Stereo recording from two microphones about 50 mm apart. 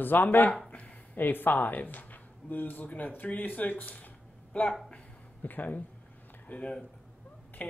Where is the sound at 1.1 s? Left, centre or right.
Left.